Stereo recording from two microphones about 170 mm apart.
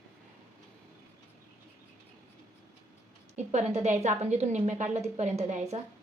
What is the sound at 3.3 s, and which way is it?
A woman's voice, 40° right (ahead or behind).